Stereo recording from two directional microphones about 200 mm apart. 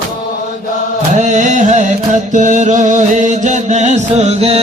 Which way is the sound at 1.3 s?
40° right (ahead or behind).